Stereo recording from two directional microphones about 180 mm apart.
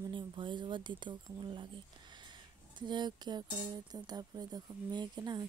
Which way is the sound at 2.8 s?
25° right (ahead or behind).